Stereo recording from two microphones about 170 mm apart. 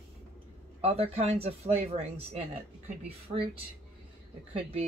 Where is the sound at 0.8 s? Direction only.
35° right (ahead or behind).